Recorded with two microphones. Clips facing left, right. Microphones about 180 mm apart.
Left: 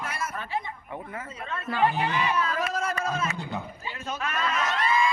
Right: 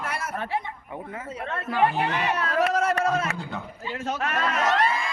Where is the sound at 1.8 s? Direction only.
60° right (ahead or behind).